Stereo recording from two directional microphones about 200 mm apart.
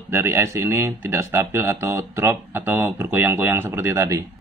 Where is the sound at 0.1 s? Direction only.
10° right (ahead or behind).